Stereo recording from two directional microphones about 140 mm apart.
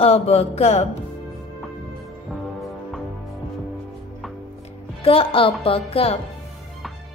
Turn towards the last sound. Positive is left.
turn(degrees=45)  # may be behind; listen again after turning